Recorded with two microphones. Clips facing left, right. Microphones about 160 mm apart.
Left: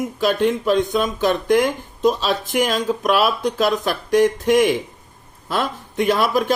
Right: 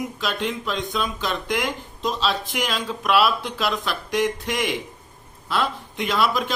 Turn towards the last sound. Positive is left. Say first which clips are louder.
# left 5 dB
turn(degrees=50)  # may be behind; listen again after turning